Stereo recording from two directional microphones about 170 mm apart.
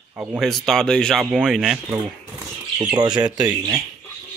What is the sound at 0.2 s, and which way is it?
Speech, 10° right (ahead or behind).